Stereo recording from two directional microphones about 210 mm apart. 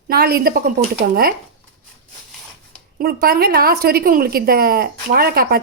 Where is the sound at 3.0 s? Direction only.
50° right (ahead or behind).